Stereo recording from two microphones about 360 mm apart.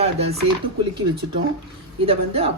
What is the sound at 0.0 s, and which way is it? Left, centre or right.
Speech, centre.